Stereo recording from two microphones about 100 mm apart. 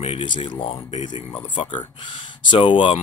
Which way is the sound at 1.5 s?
55° left (ahead or behind).